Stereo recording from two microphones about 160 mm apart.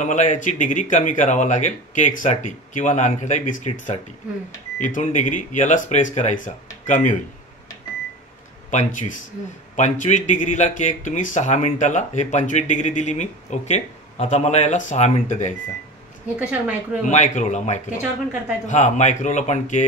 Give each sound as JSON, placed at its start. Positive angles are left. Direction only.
{"t": 0.0, "sound": "speech", "side_deg": 50}
{"t": 8.6, "sound": "speech", "side_deg": 50}
{"t": 16.3, "sound": "a woman's voice", "side_deg": -10}
{"t": 17.0, "sound": "speech", "side_deg": 50}